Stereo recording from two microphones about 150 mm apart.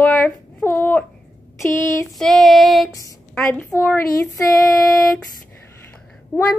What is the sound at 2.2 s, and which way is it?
Child singing, centre (ahead or behind).